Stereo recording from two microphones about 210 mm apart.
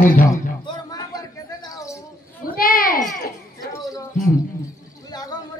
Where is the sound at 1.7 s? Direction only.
15° left (ahead or behind).